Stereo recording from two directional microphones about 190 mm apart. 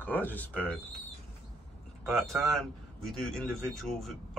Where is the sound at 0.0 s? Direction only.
10° left (ahead or behind).